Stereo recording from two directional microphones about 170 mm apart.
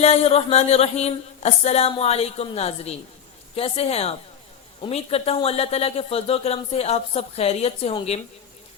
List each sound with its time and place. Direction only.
0.0 s speech: 40° left (ahead or behind)